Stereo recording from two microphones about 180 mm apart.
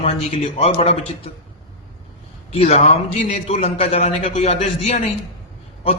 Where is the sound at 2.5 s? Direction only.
35° left (ahead or behind).